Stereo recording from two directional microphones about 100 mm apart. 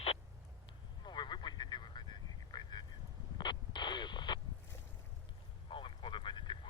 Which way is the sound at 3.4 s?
50° left (ahead or behind).